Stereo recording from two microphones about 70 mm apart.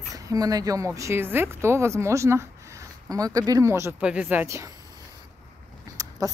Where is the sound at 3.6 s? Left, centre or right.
Right.